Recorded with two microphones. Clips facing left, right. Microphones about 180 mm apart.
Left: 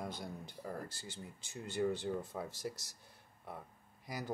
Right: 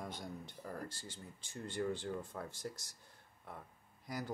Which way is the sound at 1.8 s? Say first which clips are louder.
Left 4 dB; 10° left (ahead or behind).